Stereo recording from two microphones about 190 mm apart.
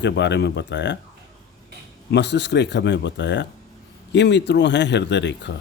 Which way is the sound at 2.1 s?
65° left (ahead or behind).